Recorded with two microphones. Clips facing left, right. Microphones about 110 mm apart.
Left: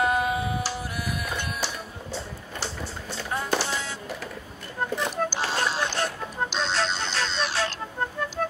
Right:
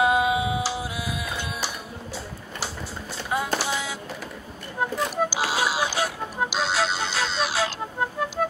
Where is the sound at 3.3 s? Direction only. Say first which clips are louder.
Right 2 dB; 10° right (ahead or behind).